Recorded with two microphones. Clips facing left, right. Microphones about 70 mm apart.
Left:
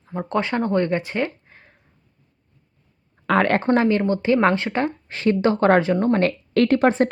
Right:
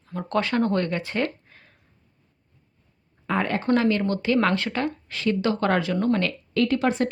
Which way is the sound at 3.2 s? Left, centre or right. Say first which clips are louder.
Left 7 dB; left.